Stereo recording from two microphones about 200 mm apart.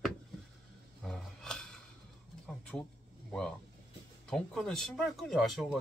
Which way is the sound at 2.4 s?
5° left (ahead or behind).